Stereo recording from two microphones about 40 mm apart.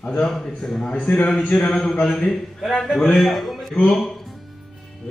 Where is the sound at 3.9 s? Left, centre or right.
Centre.